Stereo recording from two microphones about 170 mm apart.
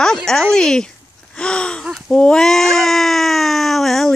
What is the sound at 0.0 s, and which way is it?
Speech, 5° left (ahead or behind).